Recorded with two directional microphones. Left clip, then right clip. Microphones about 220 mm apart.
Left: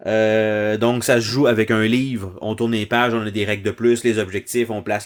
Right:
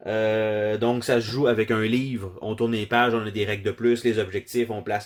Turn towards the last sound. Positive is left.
turn(degrees=30)  # may be behind; listen again after turning